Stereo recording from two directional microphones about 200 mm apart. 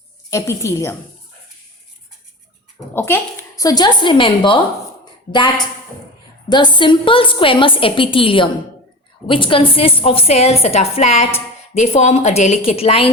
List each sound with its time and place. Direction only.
0.3 s a woman's voice: 15° left (ahead or behind)
2.9 s a woman's voice: 10° left (ahead or behind); by 13.1 s 30° left (ahead or behind)